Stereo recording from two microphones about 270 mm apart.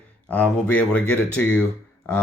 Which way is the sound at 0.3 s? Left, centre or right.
Centre.